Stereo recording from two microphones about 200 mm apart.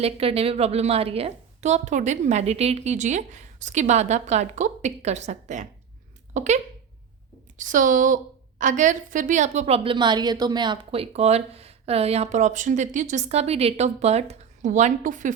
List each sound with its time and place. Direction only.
0.0 s a woman's voice: 30° right (ahead or behind)
7.6 s a woman's voice: 40° right (ahead or behind)